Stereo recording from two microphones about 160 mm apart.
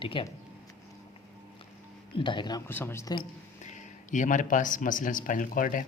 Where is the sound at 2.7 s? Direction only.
15° left (ahead or behind).